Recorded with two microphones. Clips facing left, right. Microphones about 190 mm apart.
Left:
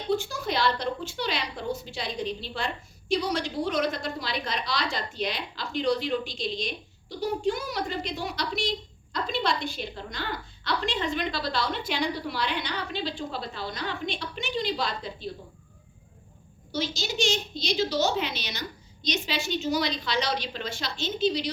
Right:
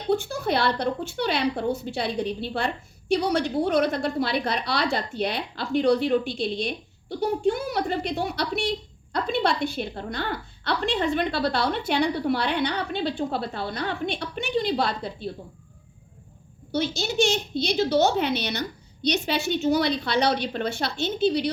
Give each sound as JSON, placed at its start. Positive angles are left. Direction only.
{"t": 0.1, "sound": "a woman's voice", "side_deg": -60}
{"t": 16.7, "sound": "a woman's voice", "side_deg": -60}